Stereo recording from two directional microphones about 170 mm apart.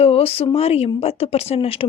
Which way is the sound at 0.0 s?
35° left (ahead or behind).